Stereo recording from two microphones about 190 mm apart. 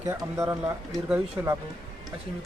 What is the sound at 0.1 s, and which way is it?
Speech, 15° right (ahead or behind).